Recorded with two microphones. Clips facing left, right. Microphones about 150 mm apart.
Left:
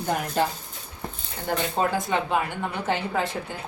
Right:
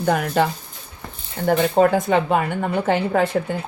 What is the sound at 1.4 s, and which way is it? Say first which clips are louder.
Speech: right 9 dB; 60° right (ahead or behind).